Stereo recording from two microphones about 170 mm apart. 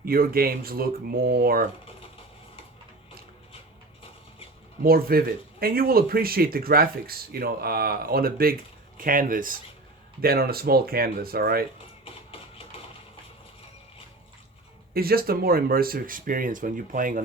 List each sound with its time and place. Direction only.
0.0 s speech: 60° right (ahead or behind)
4.8 s speech: 60° right (ahead or behind)
12.0 s printer: 35° left (ahead or behind)
14.9 s speech: 65° right (ahead or behind)